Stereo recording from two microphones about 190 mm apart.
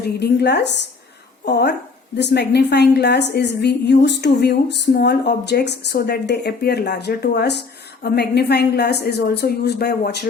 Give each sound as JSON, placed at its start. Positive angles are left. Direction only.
{"t": 0.2, "sound": "speech", "side_deg": 60}